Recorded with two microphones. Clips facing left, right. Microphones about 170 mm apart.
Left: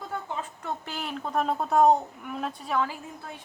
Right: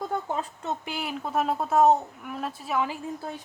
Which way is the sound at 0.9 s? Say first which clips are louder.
Right 2 dB; 5° right (ahead or behind).